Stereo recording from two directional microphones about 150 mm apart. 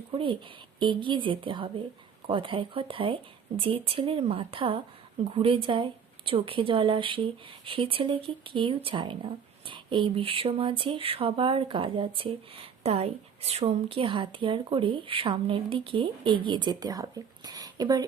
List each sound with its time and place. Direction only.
0.8 s speech: 30° right (ahead or behind)